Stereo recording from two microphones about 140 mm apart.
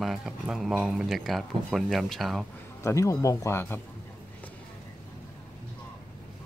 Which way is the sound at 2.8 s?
20° left (ahead or behind).